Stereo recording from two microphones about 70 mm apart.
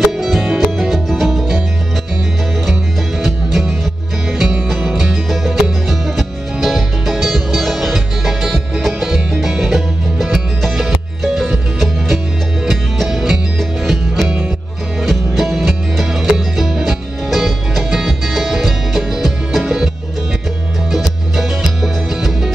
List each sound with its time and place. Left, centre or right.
0.0 s music: centre
3.2 s music: centre
4.6 s music: centre
14.2 s music: right
15.0 s music: centre
20.9 s music: centre